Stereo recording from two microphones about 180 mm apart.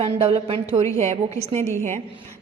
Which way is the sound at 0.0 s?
30° right (ahead or behind).